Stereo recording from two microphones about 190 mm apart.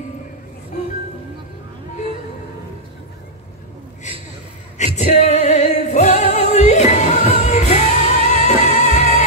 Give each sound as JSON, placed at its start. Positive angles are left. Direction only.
{"t": 4.7, "sound": "music", "side_deg": 35}